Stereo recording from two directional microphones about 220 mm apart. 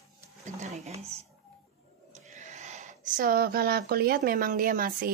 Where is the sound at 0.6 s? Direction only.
30° right (ahead or behind).